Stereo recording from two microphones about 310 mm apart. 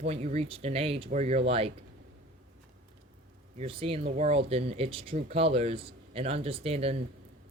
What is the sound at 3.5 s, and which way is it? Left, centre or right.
Speech, centre.